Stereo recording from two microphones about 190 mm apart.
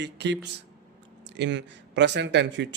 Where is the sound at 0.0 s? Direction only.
65° right (ahead or behind).